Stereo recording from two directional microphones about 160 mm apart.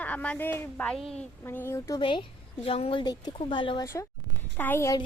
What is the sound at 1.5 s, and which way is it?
Speech, 15° left (ahead or behind).